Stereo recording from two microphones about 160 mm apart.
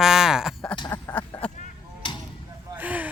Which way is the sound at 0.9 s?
10° left (ahead or behind).